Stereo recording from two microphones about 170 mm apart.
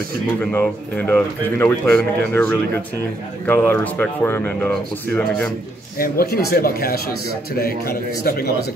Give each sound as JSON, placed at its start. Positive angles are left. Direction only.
{"t": 0.5, "sound": "speech", "side_deg": 10}
{"t": 5.9, "sound": "speech", "side_deg": 60}